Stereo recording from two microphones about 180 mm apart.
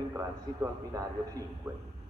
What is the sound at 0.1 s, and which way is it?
A man's voice, 15° right (ahead or behind).